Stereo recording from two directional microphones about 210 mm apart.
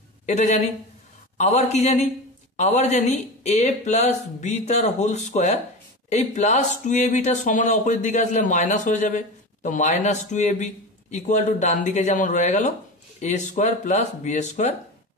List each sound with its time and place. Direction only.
0.3 s speech: 35° left (ahead or behind)